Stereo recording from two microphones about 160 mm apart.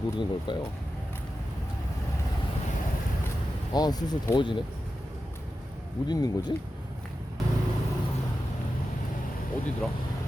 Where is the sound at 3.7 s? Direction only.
25° left (ahead or behind).